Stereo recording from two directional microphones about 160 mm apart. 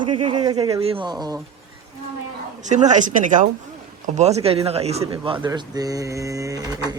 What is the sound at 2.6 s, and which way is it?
Speech, 50° right (ahead or behind).